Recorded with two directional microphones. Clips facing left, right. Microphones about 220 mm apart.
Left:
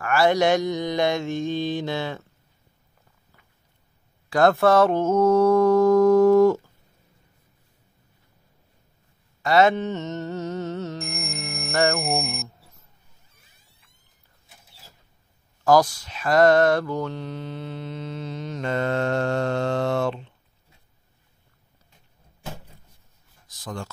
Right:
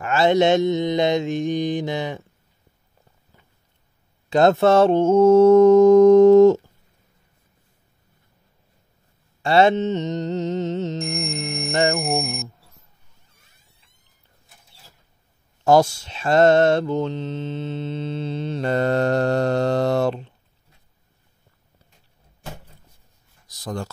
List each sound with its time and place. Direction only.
0.0 s mantra: 20° right (ahead or behind)
4.3 s mantra: 20° right (ahead or behind)
9.4 s music: 30° right (ahead or behind)
11.0 s music: centre (ahead or behind)
11.9 s a sound: centre (ahead or behind)
15.6 s mantra: 25° right (ahead or behind)
23.4 s a sound: 40° right (ahead or behind)